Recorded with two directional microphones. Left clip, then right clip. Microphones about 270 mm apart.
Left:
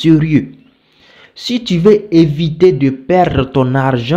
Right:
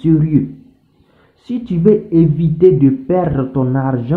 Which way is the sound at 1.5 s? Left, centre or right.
Left.